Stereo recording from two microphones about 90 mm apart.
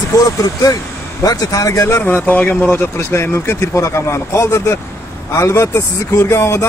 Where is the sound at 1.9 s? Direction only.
20° left (ahead or behind).